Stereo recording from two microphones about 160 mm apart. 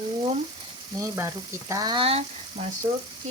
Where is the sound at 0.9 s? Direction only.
20° right (ahead or behind).